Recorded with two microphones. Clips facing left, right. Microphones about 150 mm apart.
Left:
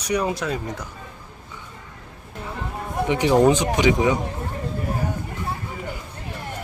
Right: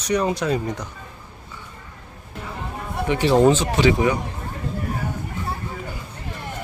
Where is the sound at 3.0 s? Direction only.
15° left (ahead or behind).